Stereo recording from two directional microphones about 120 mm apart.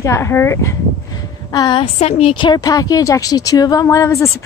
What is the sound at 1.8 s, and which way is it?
Speech, 60° left (ahead or behind).